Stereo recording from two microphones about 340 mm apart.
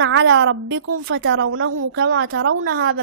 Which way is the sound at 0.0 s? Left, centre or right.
Right.